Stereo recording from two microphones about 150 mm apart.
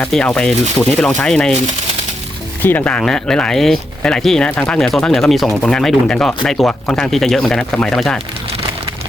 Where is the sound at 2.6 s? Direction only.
10° left (ahead or behind).